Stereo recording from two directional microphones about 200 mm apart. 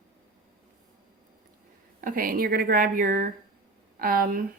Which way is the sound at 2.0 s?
45° right (ahead or behind).